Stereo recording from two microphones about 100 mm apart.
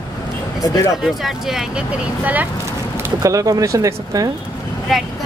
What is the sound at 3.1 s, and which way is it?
Speech, 35° right (ahead or behind).